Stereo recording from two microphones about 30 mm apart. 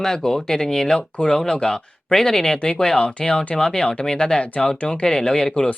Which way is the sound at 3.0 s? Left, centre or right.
Left.